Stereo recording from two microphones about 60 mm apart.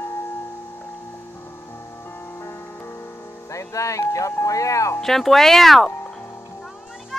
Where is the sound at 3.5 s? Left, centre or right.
Left.